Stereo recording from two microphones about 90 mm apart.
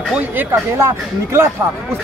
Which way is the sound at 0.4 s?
25° right (ahead or behind).